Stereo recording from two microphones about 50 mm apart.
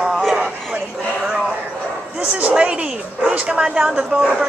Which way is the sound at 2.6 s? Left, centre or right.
Right.